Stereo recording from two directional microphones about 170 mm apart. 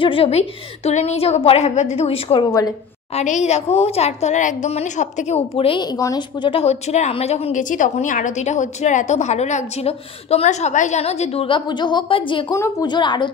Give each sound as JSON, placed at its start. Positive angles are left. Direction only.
{"t": 0.0, "sound": "a woman's voice", "side_deg": 35}
{"t": 12.5, "sound": "a woman's voice", "side_deg": 15}